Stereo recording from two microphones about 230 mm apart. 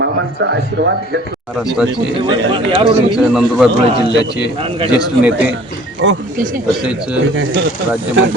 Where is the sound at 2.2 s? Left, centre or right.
Right.